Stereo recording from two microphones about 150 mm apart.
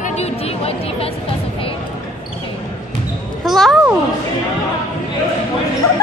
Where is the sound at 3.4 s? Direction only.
Centre (ahead or behind).